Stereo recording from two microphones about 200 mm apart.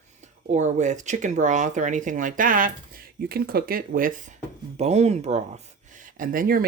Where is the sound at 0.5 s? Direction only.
35° right (ahead or behind).